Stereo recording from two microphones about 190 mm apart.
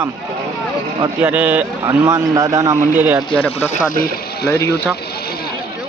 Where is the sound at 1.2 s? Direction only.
10° right (ahead or behind).